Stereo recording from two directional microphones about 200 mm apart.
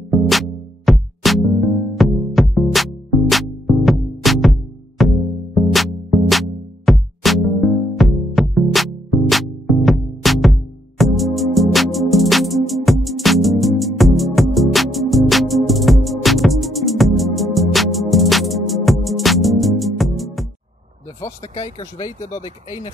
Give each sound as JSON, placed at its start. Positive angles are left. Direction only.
{"t": 0.1, "sound": "music", "side_deg": 0}
{"t": 21.2, "sound": "a sound", "side_deg": 15}
{"t": 21.7, "sound": "speech", "side_deg": 20}